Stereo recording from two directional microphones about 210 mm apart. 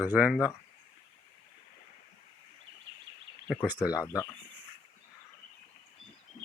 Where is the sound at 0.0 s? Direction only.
5° right (ahead or behind).